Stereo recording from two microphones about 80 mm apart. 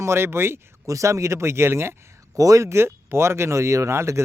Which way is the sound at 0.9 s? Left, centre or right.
Right.